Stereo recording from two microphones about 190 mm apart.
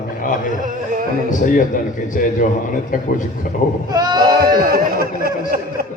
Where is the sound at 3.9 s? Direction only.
20° right (ahead or behind).